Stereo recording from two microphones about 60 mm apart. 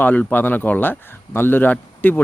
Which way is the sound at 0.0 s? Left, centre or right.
Left.